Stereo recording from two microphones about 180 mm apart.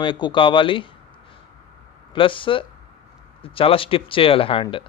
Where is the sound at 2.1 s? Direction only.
30° left (ahead or behind).